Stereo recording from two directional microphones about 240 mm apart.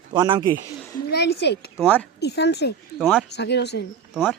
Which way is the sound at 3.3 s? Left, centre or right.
Left.